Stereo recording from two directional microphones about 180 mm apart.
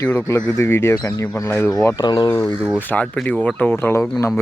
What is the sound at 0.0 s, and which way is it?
Speech, 15° left (ahead or behind).